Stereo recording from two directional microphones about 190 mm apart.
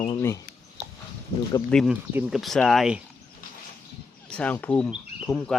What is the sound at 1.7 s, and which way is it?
Speech, 5° left (ahead or behind).